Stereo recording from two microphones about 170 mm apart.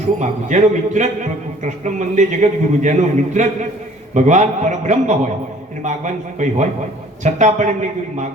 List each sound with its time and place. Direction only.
0.2 s a man's voice: 45° right (ahead or behind)
6.4 s a man's voice: 45° right (ahead or behind)